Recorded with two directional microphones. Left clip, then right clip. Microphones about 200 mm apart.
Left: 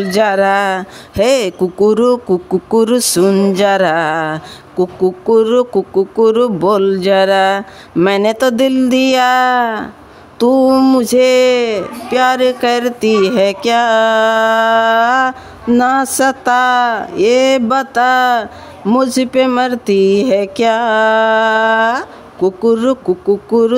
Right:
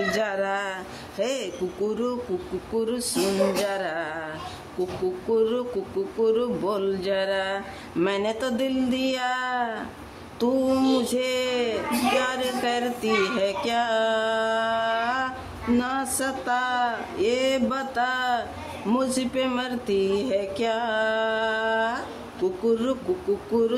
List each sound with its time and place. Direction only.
0.1 s speech: 40° left (ahead or behind)